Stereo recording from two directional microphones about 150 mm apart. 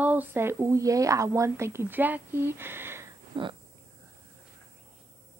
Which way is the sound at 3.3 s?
30° right (ahead or behind).